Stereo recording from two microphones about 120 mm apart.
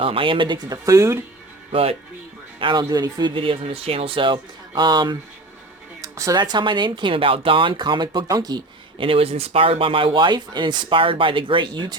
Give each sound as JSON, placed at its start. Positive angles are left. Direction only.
{"t": 0.0, "sound": "speech", "side_deg": -50}
{"t": 1.7, "sound": "speech", "side_deg": -55}
{"t": 2.6, "sound": "speech", "side_deg": -40}
{"t": 6.0, "sound": "speech", "side_deg": -25}
{"t": 9.0, "sound": "speech", "side_deg": -50}